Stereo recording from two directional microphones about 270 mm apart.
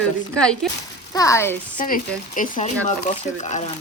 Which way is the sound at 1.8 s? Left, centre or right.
Left.